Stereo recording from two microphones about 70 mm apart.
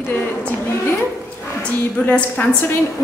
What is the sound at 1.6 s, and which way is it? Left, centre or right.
A woman's voice, left.